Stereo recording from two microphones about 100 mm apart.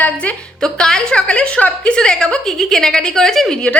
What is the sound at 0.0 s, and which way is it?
A woman's voice, 10° left (ahead or behind).